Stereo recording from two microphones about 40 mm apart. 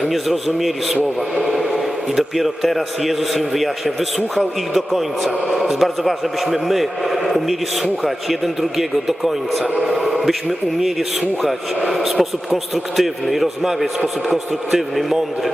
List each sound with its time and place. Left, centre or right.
0.0 s a man's voice: centre
9.8 s a sound: centre
11.9 s a man's voice: centre